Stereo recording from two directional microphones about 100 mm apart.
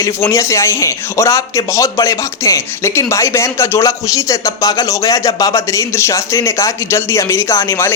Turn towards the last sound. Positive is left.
turn(degrees=25)  # may be behind; listen again after turning